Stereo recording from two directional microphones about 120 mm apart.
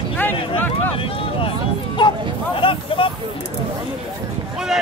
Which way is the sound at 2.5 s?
50° left (ahead or behind).